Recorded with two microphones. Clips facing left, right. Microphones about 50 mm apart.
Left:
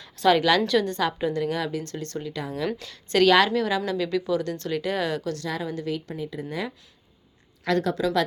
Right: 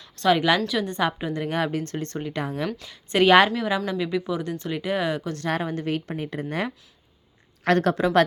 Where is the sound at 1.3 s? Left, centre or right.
Right.